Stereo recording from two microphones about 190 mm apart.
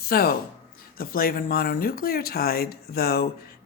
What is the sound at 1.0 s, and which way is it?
Speech, 50° left (ahead or behind).